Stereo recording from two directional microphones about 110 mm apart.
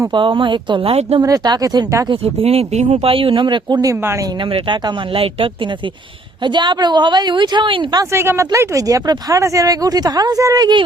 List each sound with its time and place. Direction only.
0.1 s a woman's voice: 50° right (ahead or behind)
1.2 s speech: 30° right (ahead or behind)
2.2 s speech: 65° right (ahead or behind); by 3.9 s 35° right (ahead or behind)
4.5 s a woman's voice: 55° right (ahead or behind)
8.1 s speech: 25° right (ahead or behind)